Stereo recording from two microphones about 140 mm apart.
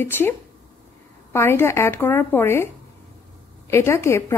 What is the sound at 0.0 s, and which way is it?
Speech, 15° left (ahead or behind).